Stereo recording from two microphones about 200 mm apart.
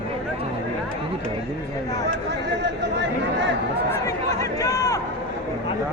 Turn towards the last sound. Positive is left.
turn(degrees=15)  # may be behind; listen again after turning